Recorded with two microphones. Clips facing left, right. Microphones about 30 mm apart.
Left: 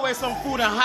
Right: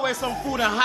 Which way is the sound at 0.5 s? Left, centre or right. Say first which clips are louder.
Even; centre.